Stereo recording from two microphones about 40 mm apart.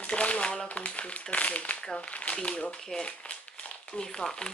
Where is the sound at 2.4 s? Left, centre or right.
Left.